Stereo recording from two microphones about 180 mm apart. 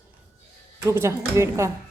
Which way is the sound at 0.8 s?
15° right (ahead or behind).